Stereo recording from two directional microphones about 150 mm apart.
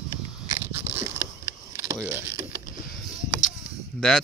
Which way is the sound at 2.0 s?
15° right (ahead or behind).